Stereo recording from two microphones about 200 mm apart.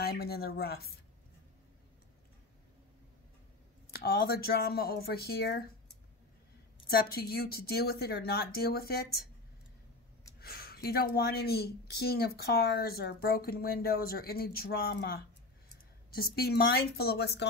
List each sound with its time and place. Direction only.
0.0 s a woman's voice: 50° left (ahead or behind)
4.0 s a woman's voice: 50° left (ahead or behind)
6.9 s a woman's voice: 50° left (ahead or behind)
10.4 s a woman's voice: 50° left (ahead or behind)